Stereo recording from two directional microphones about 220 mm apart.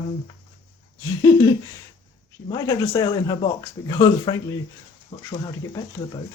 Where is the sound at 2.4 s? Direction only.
20° left (ahead or behind).